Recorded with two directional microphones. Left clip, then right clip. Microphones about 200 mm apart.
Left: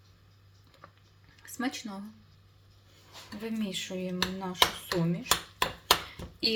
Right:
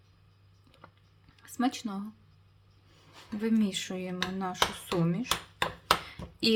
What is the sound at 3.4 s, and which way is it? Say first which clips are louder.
Speech: right 5 dB; 30° right (ahead or behind).